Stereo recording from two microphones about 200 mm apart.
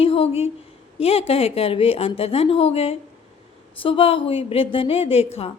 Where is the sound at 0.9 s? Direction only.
30° left (ahead or behind).